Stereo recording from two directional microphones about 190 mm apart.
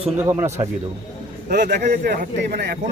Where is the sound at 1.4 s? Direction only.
45° right (ahead or behind).